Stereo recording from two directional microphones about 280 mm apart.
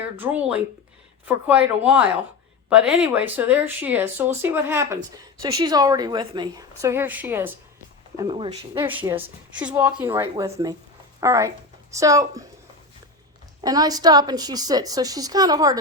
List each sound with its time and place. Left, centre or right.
0.0 s a woman's voice: centre
13.6 s a woman's voice: centre